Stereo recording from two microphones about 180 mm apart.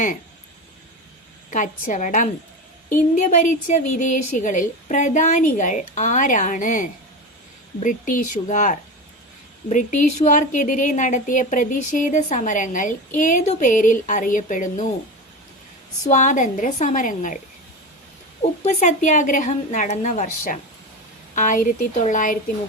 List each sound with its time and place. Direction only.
1.5 s a woman's voice: 45° left (ahead or behind)
16.0 s a woman's voice: 45° left (ahead or behind)
18.6 s a woman's voice: 40° left (ahead or behind)